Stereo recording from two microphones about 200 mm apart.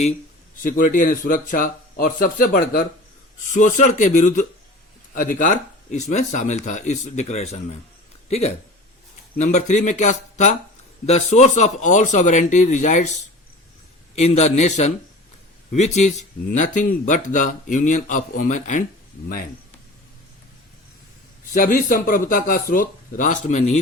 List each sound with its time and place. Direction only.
0.6 s a man's voice: 45° left (ahead or behind)
21.5 s speech: 40° left (ahead or behind)